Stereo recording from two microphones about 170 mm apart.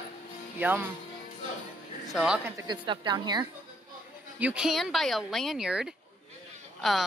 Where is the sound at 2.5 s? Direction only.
25° right (ahead or behind).